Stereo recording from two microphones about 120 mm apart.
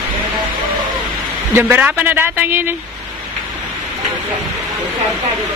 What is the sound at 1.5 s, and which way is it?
A man's voice, 15° right (ahead or behind).